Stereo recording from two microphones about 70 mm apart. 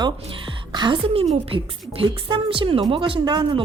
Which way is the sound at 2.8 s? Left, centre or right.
Right.